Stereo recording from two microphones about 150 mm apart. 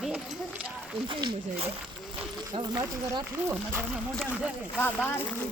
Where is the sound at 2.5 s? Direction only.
30° right (ahead or behind).